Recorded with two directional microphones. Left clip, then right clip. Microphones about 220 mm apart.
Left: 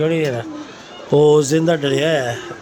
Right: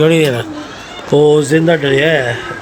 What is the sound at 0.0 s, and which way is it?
Speech, 5° right (ahead or behind).